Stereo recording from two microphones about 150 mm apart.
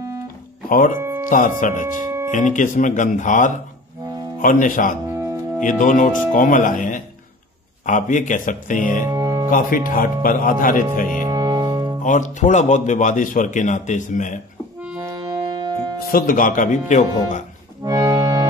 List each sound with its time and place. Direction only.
0.7 s speech: 65° left (ahead or behind)
0.9 s music: 15° right (ahead or behind)
1.6 s speech: 55° left (ahead or behind)
5.1 s music: 20° right (ahead or behind)
5.6 s speech: 60° left (ahead or behind)
9.0 s music: 25° right (ahead or behind)
9.5 s speech: 60° left (ahead or behind)
11.2 s music: 25° right (ahead or behind)
12.0 s speech: 55° left (ahead or behind)
15.0 s music: 25° right (ahead or behind)
16.1 s speech: 70° left (ahead or behind); by 17.4 s 55° left (ahead or behind)
17.8 s accordion: 25° right (ahead or behind)